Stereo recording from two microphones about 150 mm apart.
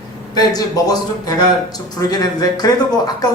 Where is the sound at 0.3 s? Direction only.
25° left (ahead or behind).